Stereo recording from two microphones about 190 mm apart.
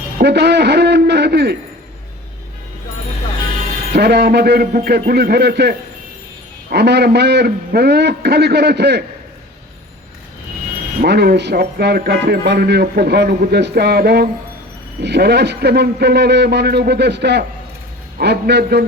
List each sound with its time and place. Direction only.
0.2 s a man's voice: 60° right (ahead or behind)
3.9 s speech: 60° right (ahead or behind)
11.0 s speech: 55° right (ahead or behind)